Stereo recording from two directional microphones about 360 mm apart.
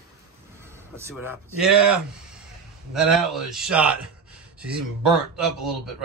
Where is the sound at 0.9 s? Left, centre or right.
Centre.